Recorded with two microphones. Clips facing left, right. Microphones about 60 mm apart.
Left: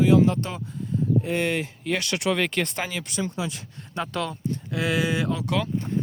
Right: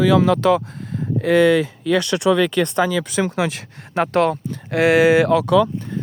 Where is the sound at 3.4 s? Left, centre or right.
Right.